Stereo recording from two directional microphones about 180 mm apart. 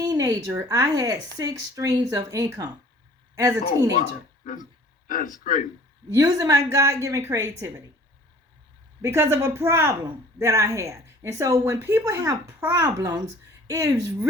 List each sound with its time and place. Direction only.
0.0 s a woman's voice: 20° right (ahead or behind)
5.0 s speech: 50° left (ahead or behind)
6.1 s a woman's voice: 20° right (ahead or behind)
9.0 s a woman's voice: 15° right (ahead or behind)